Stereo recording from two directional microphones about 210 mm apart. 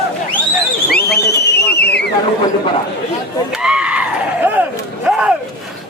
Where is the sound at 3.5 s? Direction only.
5° right (ahead or behind).